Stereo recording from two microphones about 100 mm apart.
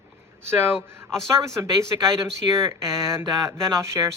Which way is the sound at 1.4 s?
30° right (ahead or behind).